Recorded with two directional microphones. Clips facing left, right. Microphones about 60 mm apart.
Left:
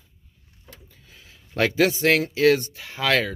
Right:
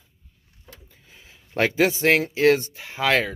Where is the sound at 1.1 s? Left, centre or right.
Right.